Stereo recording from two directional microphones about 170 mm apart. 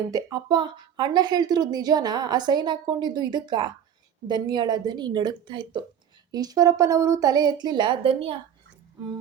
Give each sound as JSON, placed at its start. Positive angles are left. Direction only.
{"t": 0.1, "sound": "speech", "side_deg": -20}